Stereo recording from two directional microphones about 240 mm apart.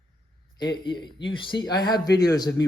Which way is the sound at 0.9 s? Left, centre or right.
Centre.